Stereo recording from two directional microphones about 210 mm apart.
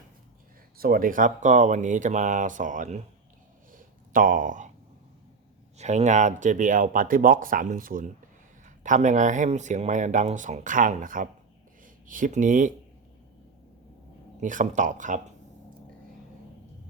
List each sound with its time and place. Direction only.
0.8 s speech: 40° right (ahead or behind)
3.7 s a sound: 40° right (ahead or behind)
5.7 s speech: 30° right (ahead or behind)
14.4 s speech: 40° right (ahead or behind)